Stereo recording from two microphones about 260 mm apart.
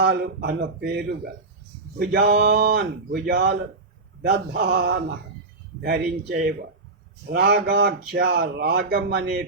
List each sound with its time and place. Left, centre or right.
0.0 s speech: right